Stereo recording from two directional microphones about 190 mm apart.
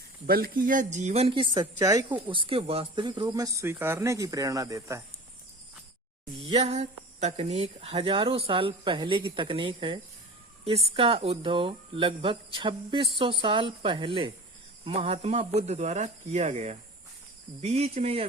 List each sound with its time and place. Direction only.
0.3 s speech: 50° right (ahead or behind); by 2.1 s 15° right (ahead or behind)
2.3 s speech: 25° right (ahead or behind)
6.6 s speech: 35° right (ahead or behind)